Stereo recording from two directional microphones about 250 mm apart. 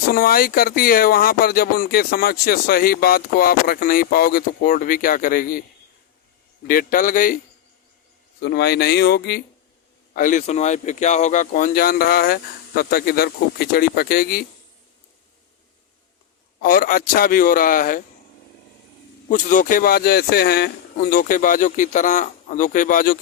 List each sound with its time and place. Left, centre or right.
0.1 s speech: left
6.7 s speech: left
8.4 s speech: left
16.6 s speech: left
19.3 s speech: left